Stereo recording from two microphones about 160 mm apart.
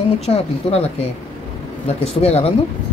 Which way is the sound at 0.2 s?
40° left (ahead or behind).